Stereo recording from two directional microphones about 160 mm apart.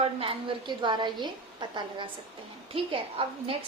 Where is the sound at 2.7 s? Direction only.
35° right (ahead or behind).